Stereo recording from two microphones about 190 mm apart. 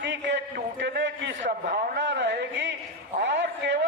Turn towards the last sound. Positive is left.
turn(degrees=-65)  # may be behind; listen again after turning